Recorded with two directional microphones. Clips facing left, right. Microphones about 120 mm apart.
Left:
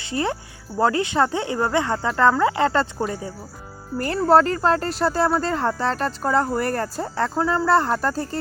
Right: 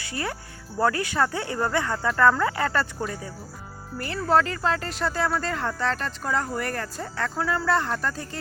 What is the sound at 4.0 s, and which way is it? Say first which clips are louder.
Speech: left 6 dB; 40° left (ahead or behind).